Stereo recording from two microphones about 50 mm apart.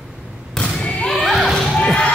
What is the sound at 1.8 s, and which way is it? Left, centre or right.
Music, left.